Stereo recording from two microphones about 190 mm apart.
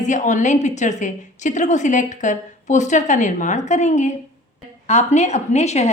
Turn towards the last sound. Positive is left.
turn(degrees=35)  # may be behind; listen again after turning